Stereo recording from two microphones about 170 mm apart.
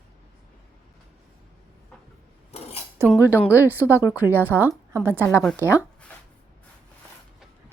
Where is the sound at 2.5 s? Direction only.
35° left (ahead or behind).